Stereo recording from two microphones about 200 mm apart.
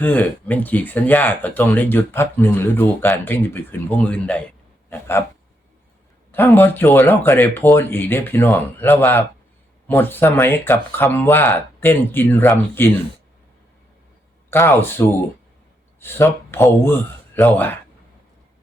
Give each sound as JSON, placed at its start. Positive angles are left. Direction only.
{"t": 0.0, "sound": "speech", "side_deg": 10}
{"t": 6.3, "sound": "speech", "side_deg": 10}
{"t": 14.5, "sound": "speech", "side_deg": 10}